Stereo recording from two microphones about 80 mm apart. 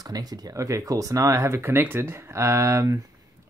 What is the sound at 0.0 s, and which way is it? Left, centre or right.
Speech, right.